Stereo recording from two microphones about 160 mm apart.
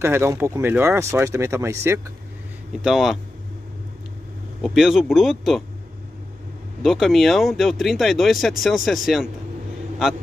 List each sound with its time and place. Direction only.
0.0 s speech: 15° right (ahead or behind)
2.8 s speech: centre (ahead or behind)
4.6 s speech: centre (ahead or behind)
6.8 s speech: centre (ahead or behind)